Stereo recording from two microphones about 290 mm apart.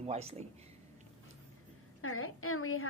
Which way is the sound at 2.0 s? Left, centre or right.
Left.